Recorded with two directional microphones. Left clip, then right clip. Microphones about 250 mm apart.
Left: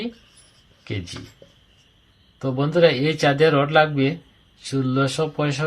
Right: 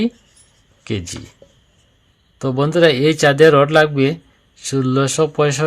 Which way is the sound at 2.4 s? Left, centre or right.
Right.